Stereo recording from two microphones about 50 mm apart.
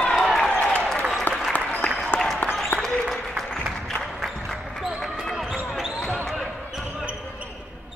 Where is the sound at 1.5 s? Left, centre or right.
Left.